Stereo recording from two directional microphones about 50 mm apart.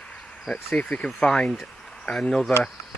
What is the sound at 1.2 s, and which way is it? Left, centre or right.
Speech, centre.